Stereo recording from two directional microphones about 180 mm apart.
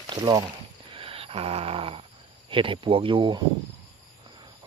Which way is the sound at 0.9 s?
30° right (ahead or behind).